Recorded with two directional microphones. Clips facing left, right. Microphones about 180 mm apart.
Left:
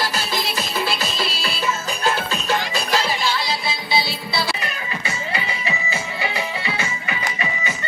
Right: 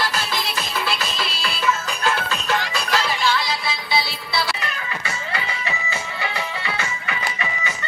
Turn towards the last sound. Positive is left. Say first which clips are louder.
# left 1 dB
turn(degrees=15)  # may be behind; listen again after turning